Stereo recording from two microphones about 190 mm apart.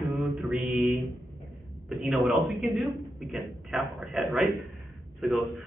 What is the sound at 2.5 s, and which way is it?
A man's voice, centre (ahead or behind).